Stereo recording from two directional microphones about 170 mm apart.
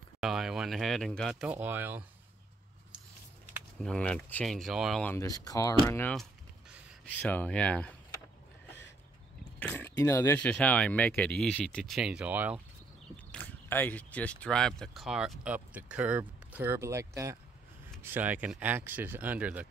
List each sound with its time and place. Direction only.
0.2 s speech: centre (ahead or behind)
3.8 s speech: 5° left (ahead or behind)
5.0 s speech: 15° left (ahead or behind)
7.2 s speech: 10° left (ahead or behind)
9.6 s speech: 10° left (ahead or behind); by 12.6 s 10° right (ahead or behind)
13.1 s speech: 10° left (ahead or behind); by 19.7 s 10° right (ahead or behind)